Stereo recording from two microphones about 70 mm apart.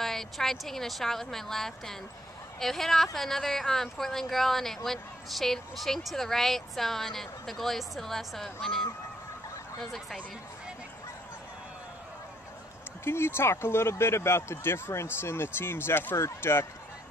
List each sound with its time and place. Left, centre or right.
0.0 s a woman's voice: centre
13.0 s speech: left